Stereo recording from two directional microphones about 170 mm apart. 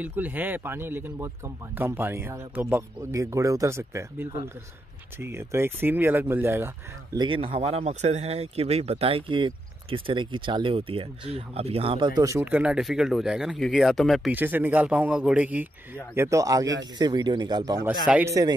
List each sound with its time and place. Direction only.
0.0 s speech: 10° right (ahead or behind)
7.2 s speech: 30° right (ahead or behind)
12.2 s speech: 15° right (ahead or behind); by 14.3 s centre (ahead or behind)
14.3 s speech: 10° right (ahead or behind)
18.0 s speech: 10° right (ahead or behind)